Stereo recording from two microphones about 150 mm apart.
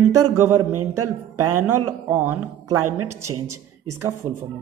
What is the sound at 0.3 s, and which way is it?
A woman's voice, 15° right (ahead or behind).